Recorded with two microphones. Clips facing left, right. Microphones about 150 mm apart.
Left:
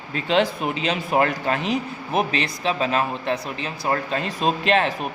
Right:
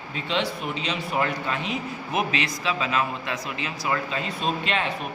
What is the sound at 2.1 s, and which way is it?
A man's voice, 35° left (ahead or behind).